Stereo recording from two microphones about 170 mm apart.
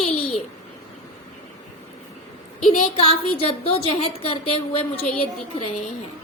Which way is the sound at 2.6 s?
40° left (ahead or behind).